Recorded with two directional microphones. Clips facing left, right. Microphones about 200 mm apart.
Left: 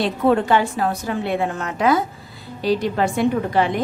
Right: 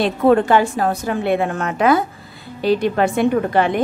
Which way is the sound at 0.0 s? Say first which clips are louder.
Right 3 dB; 50° right (ahead or behind).